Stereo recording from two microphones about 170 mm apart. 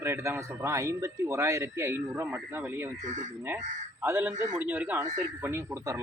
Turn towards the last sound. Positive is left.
turn(degrees=-15)  # may be behind; listen again after turning